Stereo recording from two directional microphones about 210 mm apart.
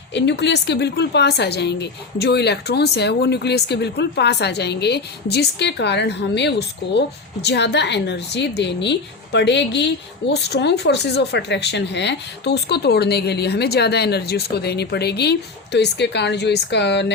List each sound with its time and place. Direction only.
0.1 s a woman's voice: 55° left (ahead or behind)